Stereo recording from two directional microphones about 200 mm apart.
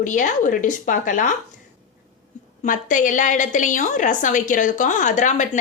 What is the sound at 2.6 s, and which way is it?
A woman's voice, 40° left (ahead or behind).